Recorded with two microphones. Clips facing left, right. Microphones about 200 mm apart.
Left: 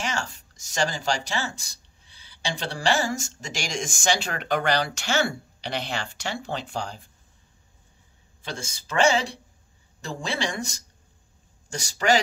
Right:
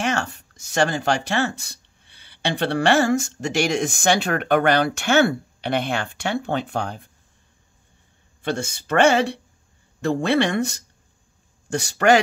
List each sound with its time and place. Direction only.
0.0 s speech: 60° right (ahead or behind)
8.4 s speech: 60° right (ahead or behind)